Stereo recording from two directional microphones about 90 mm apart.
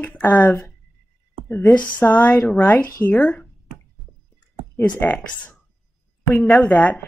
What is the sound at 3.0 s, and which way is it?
Speech, 5° left (ahead or behind).